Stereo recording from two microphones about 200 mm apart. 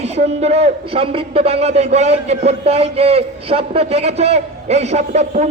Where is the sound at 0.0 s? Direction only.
35° right (ahead or behind).